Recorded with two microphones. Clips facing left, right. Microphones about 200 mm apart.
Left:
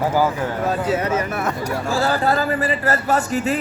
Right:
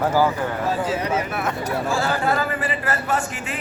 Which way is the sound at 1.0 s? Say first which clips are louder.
Left 2 dB; 45° left (ahead or behind).